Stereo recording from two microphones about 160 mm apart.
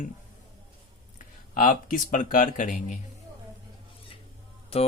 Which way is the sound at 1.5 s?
60° left (ahead or behind).